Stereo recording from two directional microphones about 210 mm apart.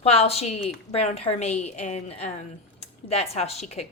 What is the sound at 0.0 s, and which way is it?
A woman's voice, 30° left (ahead or behind).